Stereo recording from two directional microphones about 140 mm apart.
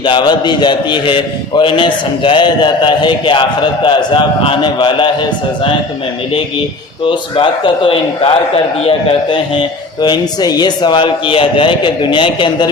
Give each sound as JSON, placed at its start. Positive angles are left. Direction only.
{"t": 0.0, "sound": "a man's voice", "side_deg": 35}
{"t": 7.1, "sound": "a man's voice", "side_deg": 40}
{"t": 10.0, "sound": "a man's voice", "side_deg": 30}